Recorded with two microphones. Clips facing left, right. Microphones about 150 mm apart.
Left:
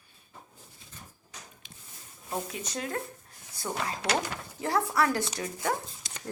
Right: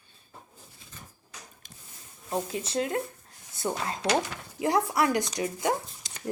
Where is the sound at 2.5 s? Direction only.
30° right (ahead or behind).